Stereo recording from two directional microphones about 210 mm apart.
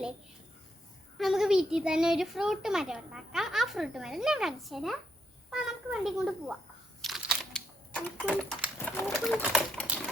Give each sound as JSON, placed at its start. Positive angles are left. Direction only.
{"t": 1.2, "sound": "a child's voice", "side_deg": 0}
{"t": 7.0, "sound": "a sound", "side_deg": 0}
{"t": 8.8, "sound": "a child's voice", "side_deg": 5}